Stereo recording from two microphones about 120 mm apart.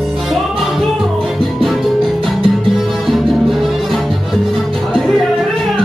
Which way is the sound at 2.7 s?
Centre (ahead or behind).